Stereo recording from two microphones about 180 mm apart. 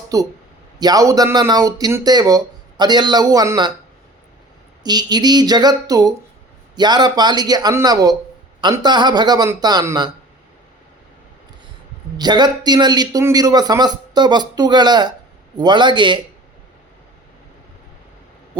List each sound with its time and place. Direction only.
0.1 s speech: 20° right (ahead or behind)
4.8 s speech: 25° right (ahead or behind)
12.1 s speech: 25° right (ahead or behind)